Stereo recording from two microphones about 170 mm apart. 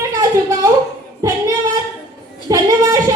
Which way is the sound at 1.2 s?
20° right (ahead or behind).